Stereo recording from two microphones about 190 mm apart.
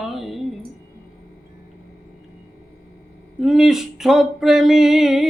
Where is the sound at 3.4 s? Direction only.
Centre (ahead or behind).